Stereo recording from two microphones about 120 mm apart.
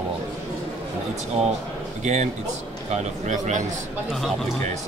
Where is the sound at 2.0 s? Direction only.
80° right.